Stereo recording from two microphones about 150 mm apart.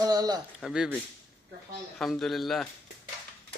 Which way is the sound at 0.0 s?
25° right (ahead or behind).